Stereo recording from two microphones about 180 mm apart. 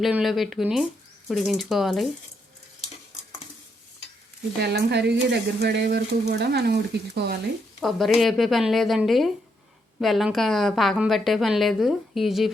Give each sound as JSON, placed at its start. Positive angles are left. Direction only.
{"t": 0.0, "sound": "a woman's voice", "side_deg": 0}
{"t": 4.6, "sound": "speech", "side_deg": -65}
{"t": 7.8, "sound": "a woman's voice", "side_deg": 0}